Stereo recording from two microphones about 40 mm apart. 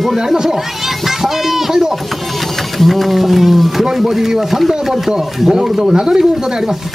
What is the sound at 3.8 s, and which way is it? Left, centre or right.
Speech, centre.